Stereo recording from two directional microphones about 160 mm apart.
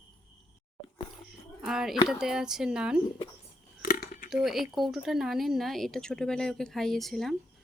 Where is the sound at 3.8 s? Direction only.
60° left (ahead or behind).